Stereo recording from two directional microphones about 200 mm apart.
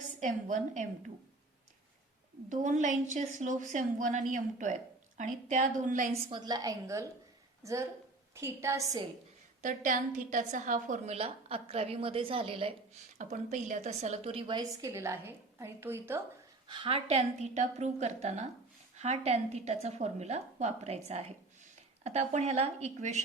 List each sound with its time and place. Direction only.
0.2 s speech: 40° right (ahead or behind)
2.5 s speech: 40° right (ahead or behind)
6.3 s a woman's voice: 20° right (ahead or behind)
9.6 s a woman's voice: 40° right (ahead or behind)
13.1 s a woman's voice: 40° right (ahead or behind); by 16.2 s 10° right (ahead or behind)
16.6 s speech: 25° right (ahead or behind)